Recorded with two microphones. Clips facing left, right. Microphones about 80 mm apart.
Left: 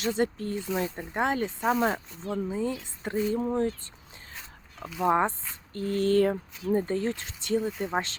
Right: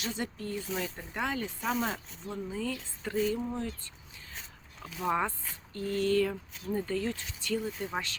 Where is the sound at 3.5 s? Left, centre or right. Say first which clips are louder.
Left 9 dB; left.